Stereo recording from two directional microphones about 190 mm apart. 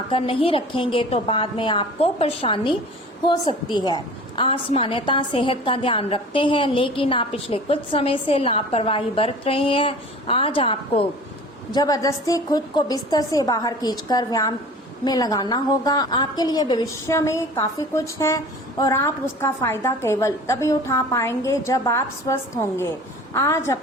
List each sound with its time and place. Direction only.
0.1 s a woman's voice: 30° left (ahead or behind); by 23.7 s 15° left (ahead or behind)